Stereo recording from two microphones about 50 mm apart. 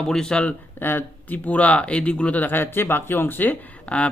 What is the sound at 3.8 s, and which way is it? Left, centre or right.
Speech, left.